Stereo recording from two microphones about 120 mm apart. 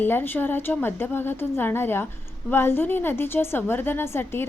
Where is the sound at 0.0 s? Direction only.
15° left (ahead or behind).